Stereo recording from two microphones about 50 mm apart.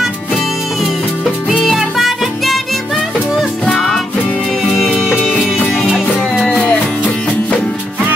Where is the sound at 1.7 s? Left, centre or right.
Centre.